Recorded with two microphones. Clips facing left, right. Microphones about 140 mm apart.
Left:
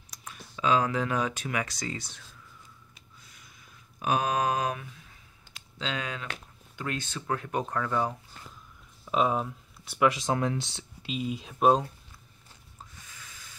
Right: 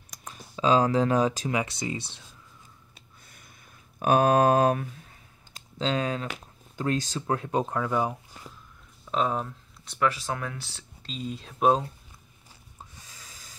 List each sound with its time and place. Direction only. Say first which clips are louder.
0.1 s speech: right 3 dB; 35° right (ahead or behind)
1.6 s speech: right 3 dB; 25° right (ahead or behind)
3.3 s a sound: right 3 dB; 55° right (ahead or behind)
4.0 s speech: right 7 dB; 50° right (ahead or behind); by 8.5 s 15° right (ahead or behind)
9.0 s speech: left 1 dB; 5° left (ahead or behind)
12.9 s snort: even; 35° right (ahead or behind)